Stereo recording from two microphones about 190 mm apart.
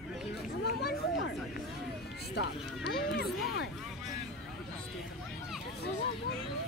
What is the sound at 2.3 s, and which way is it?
Speech, 60° left (ahead or behind).